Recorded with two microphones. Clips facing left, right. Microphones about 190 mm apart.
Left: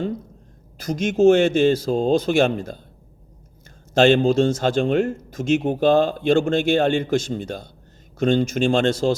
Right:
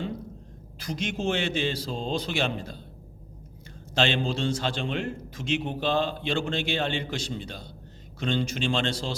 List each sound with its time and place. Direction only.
0.8 s speech: 45° left (ahead or behind)
3.9 s speech: 45° left (ahead or behind)